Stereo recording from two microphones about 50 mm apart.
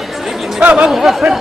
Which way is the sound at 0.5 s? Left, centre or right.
Right.